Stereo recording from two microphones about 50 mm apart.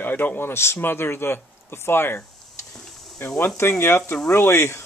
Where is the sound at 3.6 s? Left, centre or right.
Left.